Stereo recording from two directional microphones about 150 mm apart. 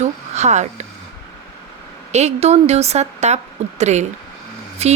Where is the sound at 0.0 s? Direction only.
50° right (ahead or behind).